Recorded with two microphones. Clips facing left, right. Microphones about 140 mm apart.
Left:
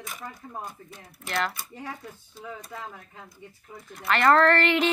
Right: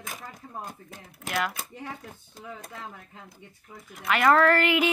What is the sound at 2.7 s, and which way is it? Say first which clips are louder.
Speech: left 4 dB; 50° left (ahead or behind).